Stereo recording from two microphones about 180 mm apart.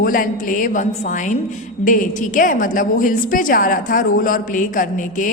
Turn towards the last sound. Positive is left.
turn(degrees=50)  # may be behind; listen again after turning